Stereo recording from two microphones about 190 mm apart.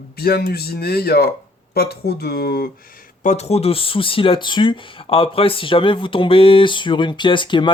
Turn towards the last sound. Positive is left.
turn(degrees=25)  # may be behind; listen again after turning